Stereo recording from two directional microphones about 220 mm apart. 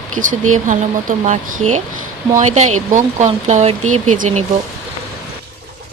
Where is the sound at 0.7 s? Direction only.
35° right (ahead or behind).